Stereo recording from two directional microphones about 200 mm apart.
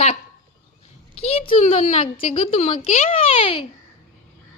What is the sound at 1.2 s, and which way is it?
A woman's voice, 30° left (ahead or behind).